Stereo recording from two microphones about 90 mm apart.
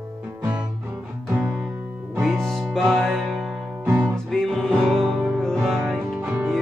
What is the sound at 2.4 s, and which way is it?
Music, 5° left (ahead or behind).